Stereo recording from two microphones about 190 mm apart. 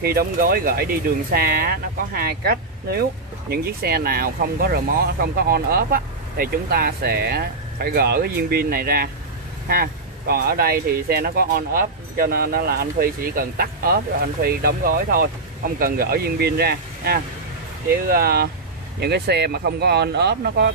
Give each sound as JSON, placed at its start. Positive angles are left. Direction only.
{"t": 0.0, "sound": "speech", "side_deg": -55}